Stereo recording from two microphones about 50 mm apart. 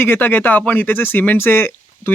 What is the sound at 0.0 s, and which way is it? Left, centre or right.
Speech, left.